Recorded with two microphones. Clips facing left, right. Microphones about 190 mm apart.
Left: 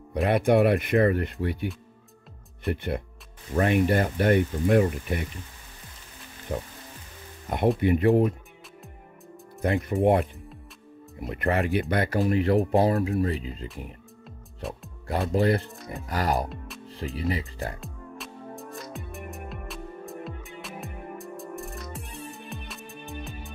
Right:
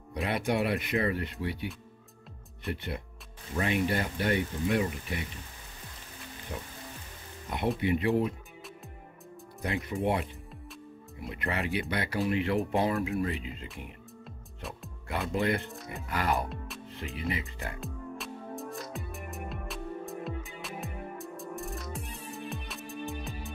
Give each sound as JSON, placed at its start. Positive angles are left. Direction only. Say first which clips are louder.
{"t": 0.1, "sound": "speech", "louder": "left 9 dB", "side_deg": 50}
{"t": 2.7, "sound": "speech", "louder": "left 7 dB", "side_deg": 50}
{"t": 6.5, "sound": "speech", "louder": "left 9 dB", "side_deg": 50}
{"t": 9.8, "sound": "speech", "louder": "left 8 dB", "side_deg": 50}
{"t": 14.6, "sound": "speech", "louder": "left 7 dB", "side_deg": 0}
{"t": 15.0, "sound": "speech", "louder": "left 6 dB", "side_deg": 35}
{"t": 16.4, "sound": "speech", "louder": "left 1 dB", "side_deg": 0}
{"t": 16.9, "sound": "speech", "louder": "left 6 dB", "side_deg": 35}
{"t": 17.7, "sound": "music", "louder": "right 1 dB", "side_deg": 0}